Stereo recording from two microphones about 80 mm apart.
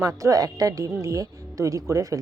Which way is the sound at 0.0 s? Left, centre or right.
Right.